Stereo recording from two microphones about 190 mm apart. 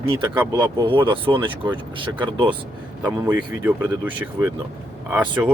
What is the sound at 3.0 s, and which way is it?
Speech, 10° right (ahead or behind).